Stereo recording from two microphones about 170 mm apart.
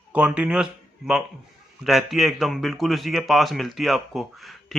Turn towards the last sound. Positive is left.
turn(degrees=0)  # may be behind; listen again after turning